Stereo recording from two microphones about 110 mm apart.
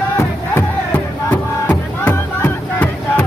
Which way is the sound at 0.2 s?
20° left (ahead or behind).